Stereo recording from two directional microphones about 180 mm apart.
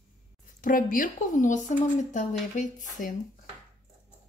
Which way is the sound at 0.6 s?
50° left (ahead or behind).